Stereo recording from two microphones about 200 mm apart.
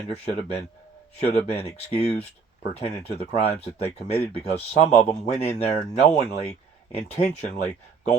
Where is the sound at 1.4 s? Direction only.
30° left (ahead or behind).